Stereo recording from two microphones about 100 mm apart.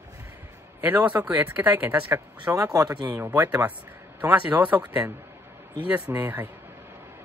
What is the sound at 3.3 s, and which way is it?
A man's voice, 15° right (ahead or behind).